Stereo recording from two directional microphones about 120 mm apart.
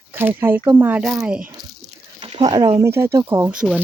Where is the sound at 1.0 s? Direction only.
Centre (ahead or behind).